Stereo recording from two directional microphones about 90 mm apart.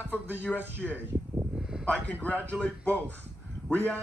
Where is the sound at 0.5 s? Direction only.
15° left (ahead or behind).